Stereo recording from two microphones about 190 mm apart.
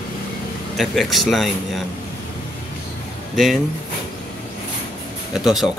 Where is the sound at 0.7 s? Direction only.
Centre (ahead or behind).